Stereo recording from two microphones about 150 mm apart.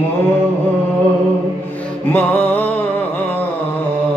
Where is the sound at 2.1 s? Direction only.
10° left (ahead or behind).